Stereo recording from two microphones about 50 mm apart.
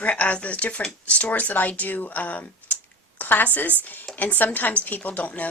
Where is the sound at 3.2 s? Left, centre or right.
Left.